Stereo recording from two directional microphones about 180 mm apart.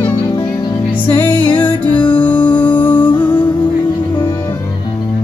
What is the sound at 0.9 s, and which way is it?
Music, 10° left (ahead or behind).